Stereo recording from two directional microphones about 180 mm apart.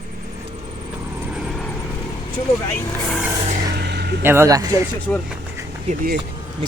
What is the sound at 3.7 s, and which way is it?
Vehicle, 65° right (ahead or behind).